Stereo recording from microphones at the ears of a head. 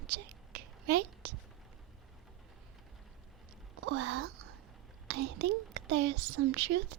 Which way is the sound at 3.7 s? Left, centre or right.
Right.